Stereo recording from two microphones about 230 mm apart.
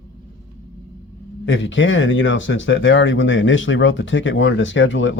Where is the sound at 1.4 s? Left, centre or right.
Left.